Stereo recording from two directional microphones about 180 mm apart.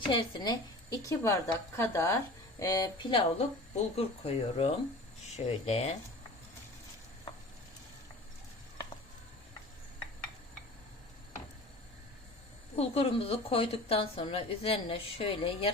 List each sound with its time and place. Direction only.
0.0 s a woman's voice: 30° left (ahead or behind)
12.7 s a woman's voice: 35° left (ahead or behind)